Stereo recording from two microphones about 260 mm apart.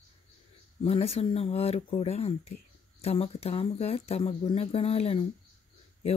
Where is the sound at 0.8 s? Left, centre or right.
Left.